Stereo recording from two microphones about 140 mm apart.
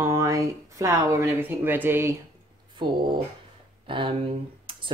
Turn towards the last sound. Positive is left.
turn(degrees=-40)  # may be behind; listen again after turning